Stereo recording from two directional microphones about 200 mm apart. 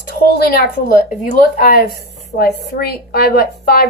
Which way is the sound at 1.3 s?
45° left (ahead or behind).